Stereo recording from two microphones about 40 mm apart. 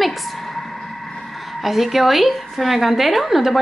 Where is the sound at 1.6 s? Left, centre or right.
Centre.